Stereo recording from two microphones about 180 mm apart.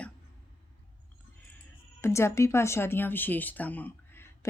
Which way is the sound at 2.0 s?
15° left (ahead or behind).